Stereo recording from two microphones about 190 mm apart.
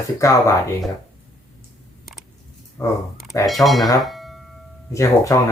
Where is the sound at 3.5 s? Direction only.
Centre (ahead or behind).